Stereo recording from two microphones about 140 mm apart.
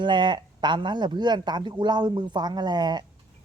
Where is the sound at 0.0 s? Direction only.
35° right (ahead or behind).